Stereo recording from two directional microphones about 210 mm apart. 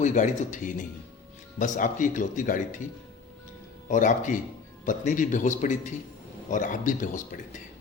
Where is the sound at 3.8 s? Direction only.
35° left (ahead or behind).